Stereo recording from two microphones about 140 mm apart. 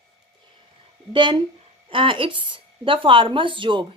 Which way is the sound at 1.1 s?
35° right (ahead or behind).